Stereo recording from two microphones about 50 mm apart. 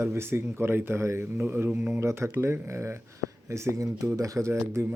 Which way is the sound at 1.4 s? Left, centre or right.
Right.